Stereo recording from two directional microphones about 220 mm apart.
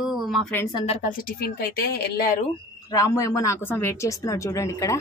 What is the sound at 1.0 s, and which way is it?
Speech, 45° left (ahead or behind).